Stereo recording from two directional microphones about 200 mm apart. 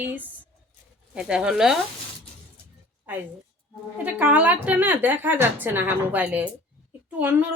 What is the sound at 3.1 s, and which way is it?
A woman's voice, 10° right (ahead or behind).